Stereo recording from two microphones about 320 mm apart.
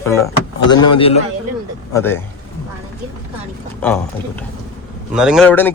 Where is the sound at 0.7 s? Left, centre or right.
Centre.